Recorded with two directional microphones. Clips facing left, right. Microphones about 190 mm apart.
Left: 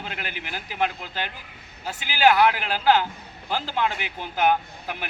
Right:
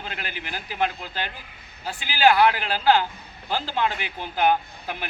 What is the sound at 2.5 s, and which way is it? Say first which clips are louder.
A man's voice: even; 15° left (ahead or behind).